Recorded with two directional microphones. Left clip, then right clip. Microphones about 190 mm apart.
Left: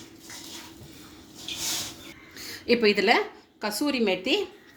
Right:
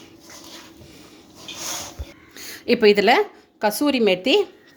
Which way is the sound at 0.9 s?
40° right (ahead or behind).